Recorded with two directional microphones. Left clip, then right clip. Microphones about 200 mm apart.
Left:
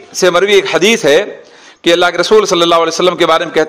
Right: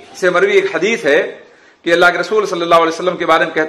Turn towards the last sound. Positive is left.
turn(degrees=40)  # may be behind; listen again after turning